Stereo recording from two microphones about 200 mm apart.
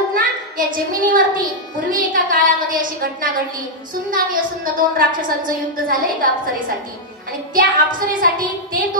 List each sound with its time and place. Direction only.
0.1 s a sound: 45° right (ahead or behind)
1.9 s a woman's voice: 45° right (ahead or behind)
7.5 s a woman's voice: 45° right (ahead or behind)